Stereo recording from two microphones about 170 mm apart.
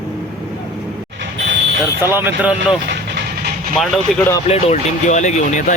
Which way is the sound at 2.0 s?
15° right (ahead or behind).